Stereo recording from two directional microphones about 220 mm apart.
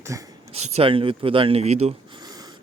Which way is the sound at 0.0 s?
15° right (ahead or behind).